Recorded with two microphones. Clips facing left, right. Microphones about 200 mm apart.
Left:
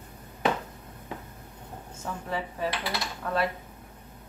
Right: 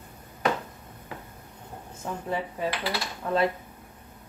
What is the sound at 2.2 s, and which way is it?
Speech, 15° right (ahead or behind).